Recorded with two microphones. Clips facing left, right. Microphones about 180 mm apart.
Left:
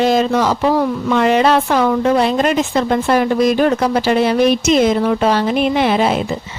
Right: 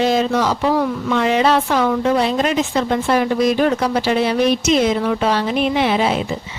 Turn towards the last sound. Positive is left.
turn(degrees=50)  # may be behind; listen again after turning